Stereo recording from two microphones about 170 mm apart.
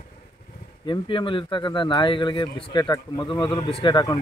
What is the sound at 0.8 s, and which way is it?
Speech, 30° left (ahead or behind).